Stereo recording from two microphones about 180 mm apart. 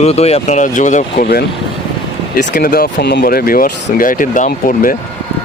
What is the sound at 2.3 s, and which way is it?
Speech, 55° left (ahead or behind).